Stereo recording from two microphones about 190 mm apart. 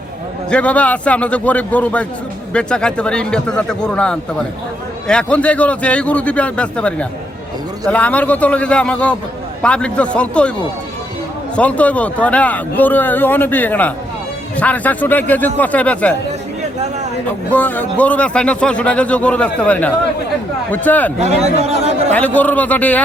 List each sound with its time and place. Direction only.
0.5 s a man's voice: 5° left (ahead or behind)
11.5 s speech: 5° left (ahead or behind)
17.5 s speech: 10° left (ahead or behind)
21.2 s a man's voice: 35° right (ahead or behind)
22.1 s speech: 10° left (ahead or behind)